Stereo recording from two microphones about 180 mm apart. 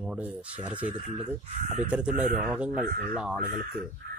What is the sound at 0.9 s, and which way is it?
Speech, 45° right (ahead or behind).